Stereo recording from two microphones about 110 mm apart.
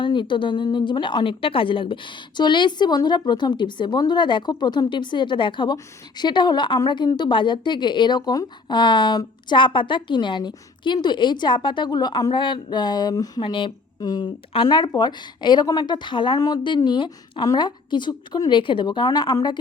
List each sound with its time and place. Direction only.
0.0 s a woman's voice: 45° left (ahead or behind)
13.4 s a woman's voice: 50° left (ahead or behind)
14.0 s a woman's voice: 35° left (ahead or behind)